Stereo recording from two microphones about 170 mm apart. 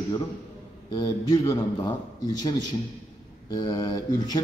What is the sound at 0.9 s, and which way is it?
A man's voice, 25° left (ahead or behind).